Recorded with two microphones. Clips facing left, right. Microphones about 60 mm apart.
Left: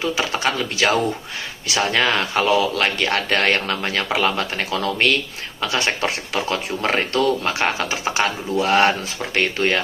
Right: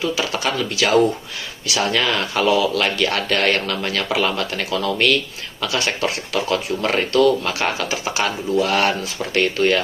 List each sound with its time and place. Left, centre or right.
0.0 s a man's voice: left